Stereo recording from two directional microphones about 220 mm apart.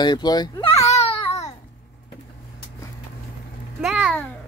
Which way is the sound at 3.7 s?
5° right (ahead or behind).